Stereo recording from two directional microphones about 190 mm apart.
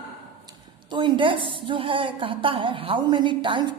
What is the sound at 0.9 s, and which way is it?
Speech, 25° right (ahead or behind).